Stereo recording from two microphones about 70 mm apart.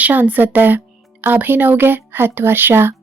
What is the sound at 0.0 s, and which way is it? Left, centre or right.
Speech, right.